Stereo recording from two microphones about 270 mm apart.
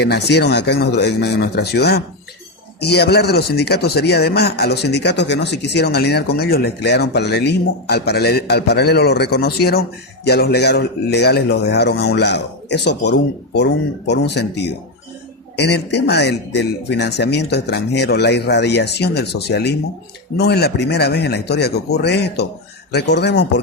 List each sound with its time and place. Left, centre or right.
0.0 s speech: left